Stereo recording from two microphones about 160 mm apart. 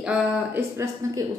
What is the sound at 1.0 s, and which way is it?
Speech, 20° right (ahead or behind).